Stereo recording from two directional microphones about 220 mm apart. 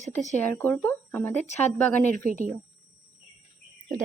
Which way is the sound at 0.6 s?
5° left (ahead or behind).